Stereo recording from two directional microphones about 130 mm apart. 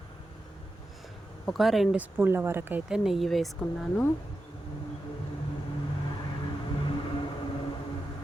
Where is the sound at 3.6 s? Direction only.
15° left (ahead or behind).